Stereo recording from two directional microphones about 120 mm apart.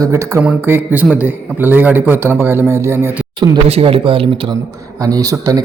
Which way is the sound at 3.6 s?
55° right (ahead or behind).